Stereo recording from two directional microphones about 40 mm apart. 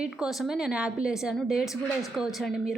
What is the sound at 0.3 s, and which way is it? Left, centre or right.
Speech, centre.